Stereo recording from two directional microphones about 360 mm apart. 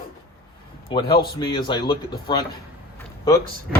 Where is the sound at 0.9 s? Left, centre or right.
Centre.